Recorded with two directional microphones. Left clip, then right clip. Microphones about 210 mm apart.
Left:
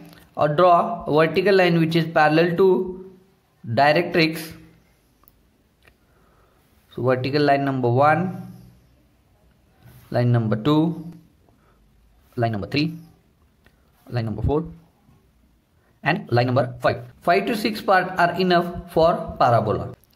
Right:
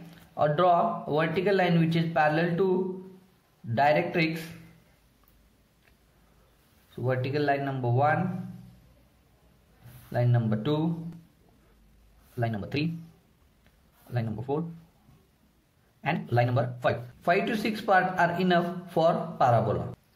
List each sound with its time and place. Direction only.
0.1 s speech: 25° left (ahead or behind)
7.0 s speech: 30° left (ahead or behind)
10.1 s speech: 30° left (ahead or behind)
12.4 s speech: 30° left (ahead or behind)
14.1 s speech: 25° left (ahead or behind)
16.0 s speech: 30° left (ahead or behind)